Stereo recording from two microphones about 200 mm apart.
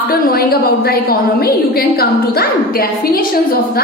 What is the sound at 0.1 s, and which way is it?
A woman's voice, 50° left (ahead or behind).